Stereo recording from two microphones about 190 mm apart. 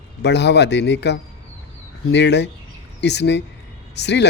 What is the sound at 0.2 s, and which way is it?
Speech, 65° left (ahead or behind).